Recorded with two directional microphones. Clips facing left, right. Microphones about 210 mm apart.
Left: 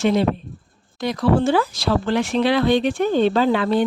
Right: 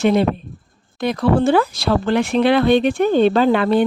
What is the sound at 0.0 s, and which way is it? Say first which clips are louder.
Speech: right 3 dB; 60° right (ahead or behind).